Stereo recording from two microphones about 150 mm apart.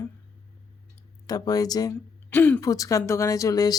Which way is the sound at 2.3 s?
15° left (ahead or behind).